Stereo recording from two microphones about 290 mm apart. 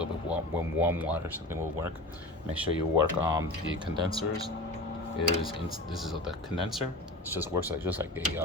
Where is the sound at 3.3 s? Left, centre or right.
Centre.